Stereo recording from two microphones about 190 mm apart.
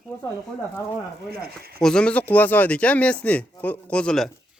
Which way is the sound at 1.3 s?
55° right (ahead or behind).